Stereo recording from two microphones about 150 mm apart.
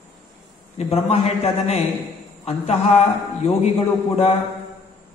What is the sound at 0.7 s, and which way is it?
A man's voice, 45° left (ahead or behind).